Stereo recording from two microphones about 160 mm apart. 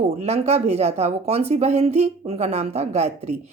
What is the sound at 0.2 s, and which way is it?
Speech, 40° right (ahead or behind).